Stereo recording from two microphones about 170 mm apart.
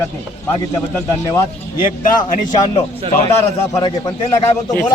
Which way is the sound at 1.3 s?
20° left (ahead or behind).